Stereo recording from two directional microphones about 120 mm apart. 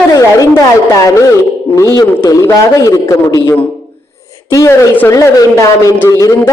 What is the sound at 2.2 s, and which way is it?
A man's voice, 25° left (ahead or behind).